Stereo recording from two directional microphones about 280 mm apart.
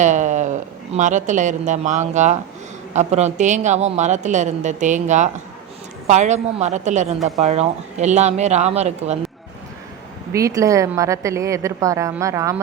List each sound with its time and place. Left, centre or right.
0.0 s a sound: right
0.9 s a woman's voice: right
10.3 s a woman's voice: centre